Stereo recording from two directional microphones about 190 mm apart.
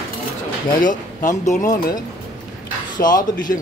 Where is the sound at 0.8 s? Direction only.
45° left (ahead or behind).